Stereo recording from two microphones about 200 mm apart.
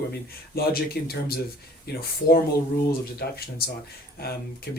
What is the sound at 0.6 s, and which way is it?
Speech, 50° left (ahead or behind).